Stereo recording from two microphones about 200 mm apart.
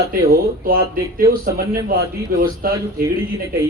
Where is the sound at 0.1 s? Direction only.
45° right (ahead or behind).